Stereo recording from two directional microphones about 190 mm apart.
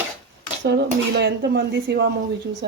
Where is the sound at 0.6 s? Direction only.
65° right (ahead or behind).